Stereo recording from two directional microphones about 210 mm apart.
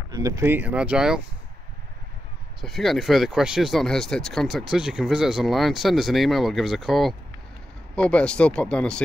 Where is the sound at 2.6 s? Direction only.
Centre (ahead or behind).